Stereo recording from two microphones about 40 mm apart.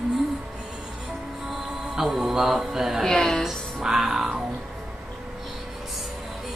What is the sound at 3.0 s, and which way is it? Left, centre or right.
Speech, centre.